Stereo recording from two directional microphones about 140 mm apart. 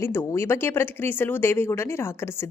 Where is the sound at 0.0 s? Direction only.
20° left (ahead or behind).